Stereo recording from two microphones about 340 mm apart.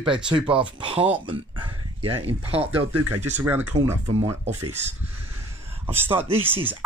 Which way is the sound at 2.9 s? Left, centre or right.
Right.